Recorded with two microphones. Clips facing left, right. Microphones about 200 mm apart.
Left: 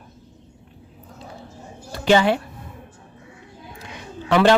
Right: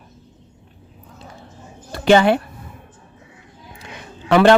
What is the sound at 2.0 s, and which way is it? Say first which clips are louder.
Speech: right 4 dB; 55° right (ahead or behind).